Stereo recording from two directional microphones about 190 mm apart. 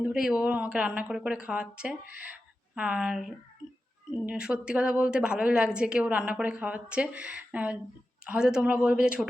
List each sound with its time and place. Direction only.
0.0 s a woman's voice: 5° right (ahead or behind)